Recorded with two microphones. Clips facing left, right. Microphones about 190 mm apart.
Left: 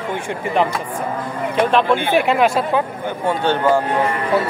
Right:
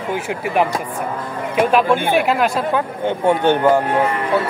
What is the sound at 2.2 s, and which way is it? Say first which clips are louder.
Speech: left 1 dB; centre (ahead or behind).